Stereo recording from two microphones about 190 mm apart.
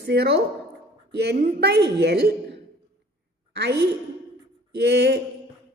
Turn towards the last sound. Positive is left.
turn(degrees=-60)  # may be behind; listen again after turning